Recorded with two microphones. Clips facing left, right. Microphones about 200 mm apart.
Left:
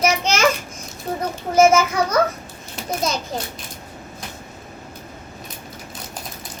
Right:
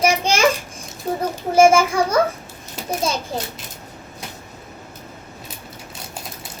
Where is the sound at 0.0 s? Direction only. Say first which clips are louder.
Right 1 dB; 30° right (ahead or behind).